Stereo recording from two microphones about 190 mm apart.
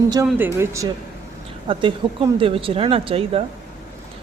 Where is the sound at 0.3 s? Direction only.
10° right (ahead or behind).